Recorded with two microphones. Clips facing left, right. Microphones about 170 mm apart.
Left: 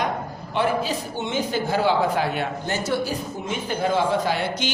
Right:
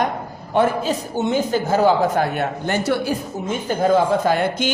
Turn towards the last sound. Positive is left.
turn(degrees=-50)  # may be behind; listen again after turning